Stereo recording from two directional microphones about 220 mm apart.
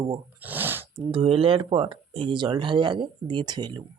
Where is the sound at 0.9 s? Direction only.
25° right (ahead or behind).